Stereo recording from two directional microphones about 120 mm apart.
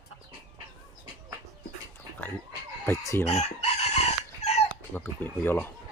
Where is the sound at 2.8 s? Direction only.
25° left (ahead or behind).